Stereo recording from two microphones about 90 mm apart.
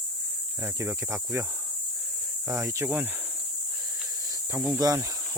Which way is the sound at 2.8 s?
15° right (ahead or behind).